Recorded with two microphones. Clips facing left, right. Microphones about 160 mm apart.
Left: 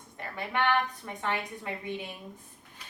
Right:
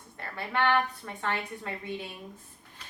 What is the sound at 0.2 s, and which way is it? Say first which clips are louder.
A woman's voice: right 1 dB; 15° left (ahead or behind).